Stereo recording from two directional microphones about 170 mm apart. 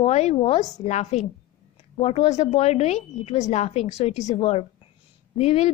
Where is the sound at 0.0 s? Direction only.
40° left (ahead or behind).